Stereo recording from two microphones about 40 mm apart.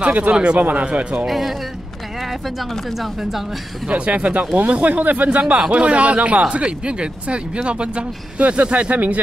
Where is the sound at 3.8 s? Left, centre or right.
Right.